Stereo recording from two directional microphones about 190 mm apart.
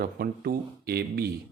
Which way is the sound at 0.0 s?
55° right (ahead or behind).